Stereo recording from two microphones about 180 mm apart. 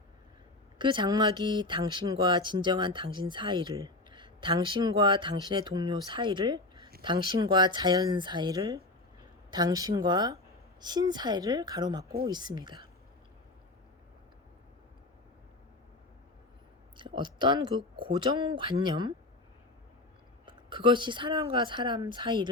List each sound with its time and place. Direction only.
0.8 s speech: 25° right (ahead or behind)
17.0 s speech: 25° right (ahead or behind)
20.4 s speech: 25° right (ahead or behind)